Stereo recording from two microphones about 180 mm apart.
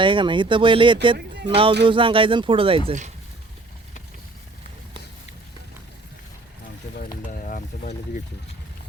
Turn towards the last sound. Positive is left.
turn(degrees=45)  # may be behind; listen again after turning